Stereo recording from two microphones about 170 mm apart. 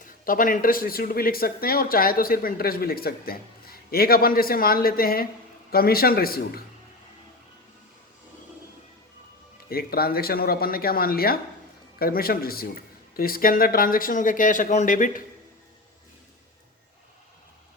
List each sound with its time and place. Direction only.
0.0 s speech: 55° left (ahead or behind)
9.6 s speech: 65° left (ahead or behind)